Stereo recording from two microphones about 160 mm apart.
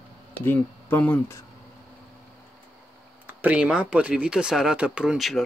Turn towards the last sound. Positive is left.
turn(degrees=0)  # may be behind; listen again after turning